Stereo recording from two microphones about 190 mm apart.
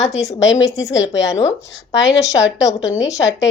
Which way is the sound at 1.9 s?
65° left (ahead or behind).